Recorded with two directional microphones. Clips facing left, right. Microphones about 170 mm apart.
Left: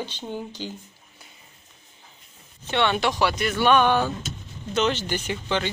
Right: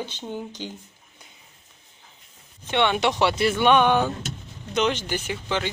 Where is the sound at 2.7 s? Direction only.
15° right (ahead or behind).